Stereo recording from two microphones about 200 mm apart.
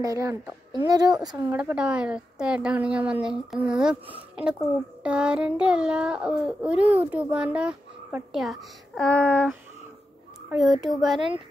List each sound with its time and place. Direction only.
0.0 s speech: 15° right (ahead or behind)
1.3 s a woman's voice: 10° right (ahead or behind)
10.9 s a woman's voice: centre (ahead or behind)
11.1 s speech: 25° right (ahead or behind)